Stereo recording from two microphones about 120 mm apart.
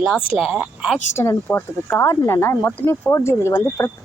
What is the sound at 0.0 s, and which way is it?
Speech, 5° right (ahead or behind).